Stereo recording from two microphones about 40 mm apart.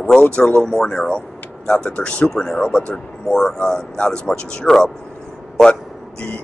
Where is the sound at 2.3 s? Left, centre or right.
Centre.